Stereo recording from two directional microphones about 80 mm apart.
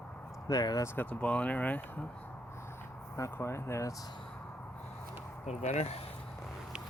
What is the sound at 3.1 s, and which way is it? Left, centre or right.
Speech, left.